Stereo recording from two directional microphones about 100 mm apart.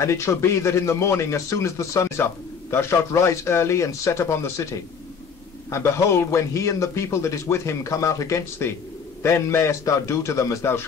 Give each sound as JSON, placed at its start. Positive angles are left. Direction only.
{"t": 0.0, "sound": "a man's voice", "side_deg": 30}